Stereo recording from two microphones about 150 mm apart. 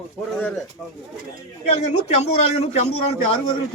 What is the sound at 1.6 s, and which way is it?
A man's voice, 45° left (ahead or behind).